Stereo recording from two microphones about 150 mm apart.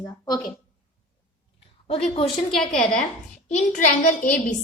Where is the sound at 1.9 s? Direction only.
40° left (ahead or behind).